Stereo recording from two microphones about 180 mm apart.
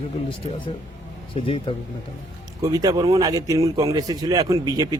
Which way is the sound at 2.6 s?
20° right (ahead or behind).